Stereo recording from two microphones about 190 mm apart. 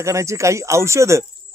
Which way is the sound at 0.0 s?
15° right (ahead or behind).